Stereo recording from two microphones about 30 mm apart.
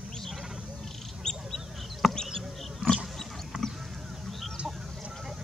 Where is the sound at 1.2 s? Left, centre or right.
Left.